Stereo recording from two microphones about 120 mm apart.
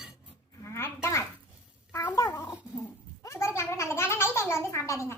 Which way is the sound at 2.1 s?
30° left (ahead or behind).